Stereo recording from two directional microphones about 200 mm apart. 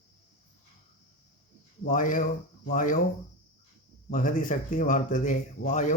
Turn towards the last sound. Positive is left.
turn(degrees=35)  # may be behind; listen again after turning